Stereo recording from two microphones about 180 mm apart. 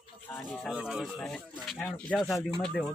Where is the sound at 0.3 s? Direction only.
Centre (ahead or behind).